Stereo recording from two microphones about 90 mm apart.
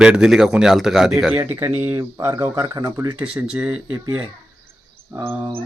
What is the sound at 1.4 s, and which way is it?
Speech, 25° right (ahead or behind).